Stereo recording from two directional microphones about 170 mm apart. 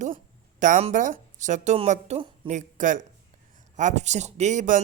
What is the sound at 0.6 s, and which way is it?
Speech, 45° right (ahead or behind).